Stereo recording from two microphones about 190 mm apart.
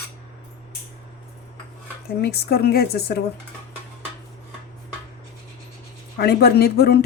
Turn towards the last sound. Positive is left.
turn(degrees=55)  # may be behind; listen again after turning